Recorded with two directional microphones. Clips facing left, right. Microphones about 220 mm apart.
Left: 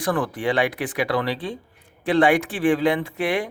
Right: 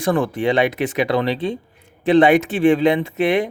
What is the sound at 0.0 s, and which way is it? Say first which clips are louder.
Speech: right 5 dB; 25° right (ahead or behind).